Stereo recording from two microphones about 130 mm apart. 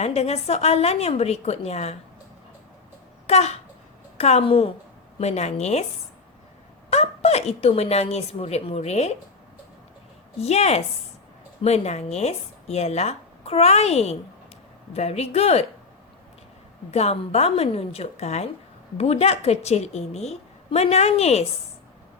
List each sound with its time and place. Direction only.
0.0 s a woman's voice: 55° left (ahead or behind)
3.2 s a woman's voice: 55° left (ahead or behind)
6.9 s speech: 55° left (ahead or behind)
10.4 s a woman's voice: 55° left (ahead or behind)
16.9 s a woman's voice: 55° left (ahead or behind)